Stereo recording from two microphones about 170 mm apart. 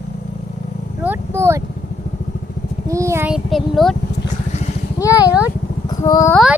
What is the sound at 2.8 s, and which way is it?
Vehicle, 20° right (ahead or behind).